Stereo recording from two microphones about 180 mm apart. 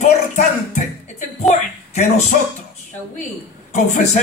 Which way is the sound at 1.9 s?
40° left (ahead or behind).